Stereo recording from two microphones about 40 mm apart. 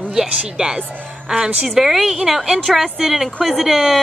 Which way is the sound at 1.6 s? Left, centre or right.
Centre.